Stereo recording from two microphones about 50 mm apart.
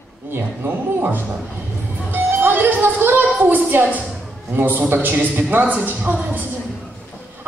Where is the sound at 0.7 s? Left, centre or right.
Right.